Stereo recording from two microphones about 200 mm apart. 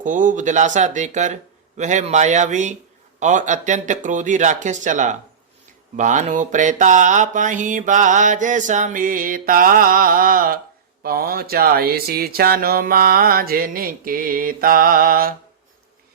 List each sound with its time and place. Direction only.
0.0 s speech: 40° right (ahead or behind)